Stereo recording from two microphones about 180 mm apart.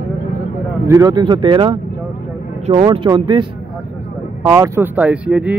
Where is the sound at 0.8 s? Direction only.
20° right (ahead or behind).